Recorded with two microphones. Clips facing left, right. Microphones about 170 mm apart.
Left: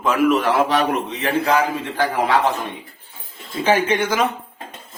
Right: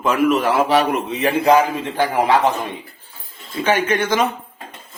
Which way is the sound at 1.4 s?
20° right (ahead or behind).